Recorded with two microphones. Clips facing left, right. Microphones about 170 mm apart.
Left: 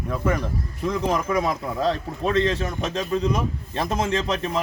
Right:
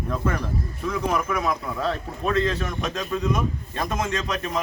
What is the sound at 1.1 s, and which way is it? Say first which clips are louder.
A man's voice: left 2 dB; 30° left (ahead or behind).